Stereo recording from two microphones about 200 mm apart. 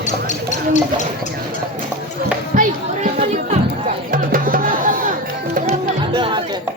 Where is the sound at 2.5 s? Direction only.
40° right (ahead or behind).